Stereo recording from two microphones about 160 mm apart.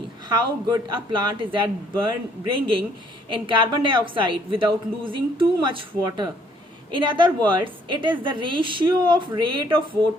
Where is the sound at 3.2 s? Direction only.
30° right (ahead or behind).